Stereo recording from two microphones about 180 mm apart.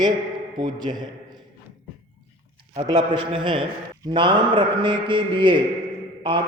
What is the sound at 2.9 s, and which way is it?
A man's voice, 25° right (ahead or behind).